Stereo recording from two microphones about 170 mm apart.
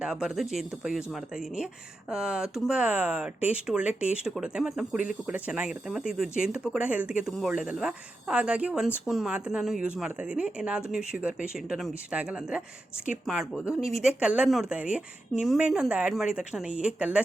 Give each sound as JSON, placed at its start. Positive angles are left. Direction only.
{"t": 0.0, "sound": "speech", "side_deg": -5}